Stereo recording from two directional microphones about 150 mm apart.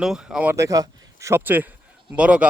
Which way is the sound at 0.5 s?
20° right (ahead or behind).